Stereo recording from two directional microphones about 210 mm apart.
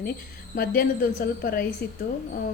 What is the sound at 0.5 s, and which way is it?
Speech, 40° left (ahead or behind).